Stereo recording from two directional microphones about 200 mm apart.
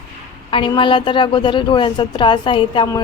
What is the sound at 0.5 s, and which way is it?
A woman's voice, 25° left (ahead or behind).